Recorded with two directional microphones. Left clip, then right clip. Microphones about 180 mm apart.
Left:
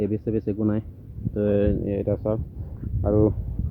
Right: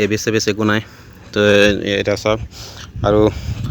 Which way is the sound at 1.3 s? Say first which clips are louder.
Right 11 dB; 30° right (ahead or behind).